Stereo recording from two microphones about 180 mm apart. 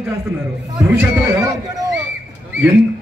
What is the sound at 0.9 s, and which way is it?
Speech, 15° right (ahead or behind).